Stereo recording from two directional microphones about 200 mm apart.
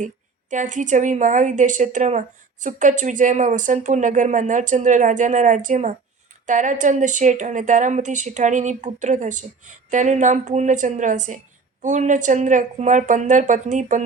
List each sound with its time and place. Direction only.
0.5 s a woman's voice: 40° right (ahead or behind)